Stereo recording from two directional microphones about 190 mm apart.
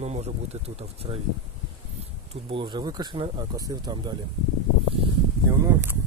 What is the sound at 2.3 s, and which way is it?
Speech, 30° right (ahead or behind).